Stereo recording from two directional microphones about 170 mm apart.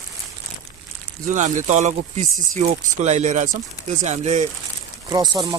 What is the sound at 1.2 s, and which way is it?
Speech, 45° right (ahead or behind).